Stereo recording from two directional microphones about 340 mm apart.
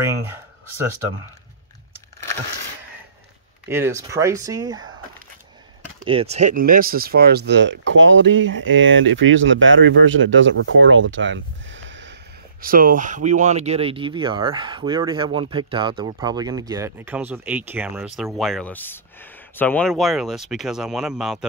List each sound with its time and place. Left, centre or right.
3.6 s speech: centre
6.0 s speech: centre